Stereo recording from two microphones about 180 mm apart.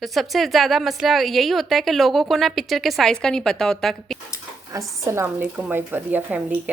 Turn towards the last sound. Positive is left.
turn(degrees=-10)  # may be behind; listen again after turning